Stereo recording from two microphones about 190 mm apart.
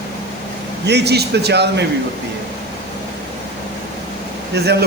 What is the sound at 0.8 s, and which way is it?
Speech, 60° right (ahead or behind).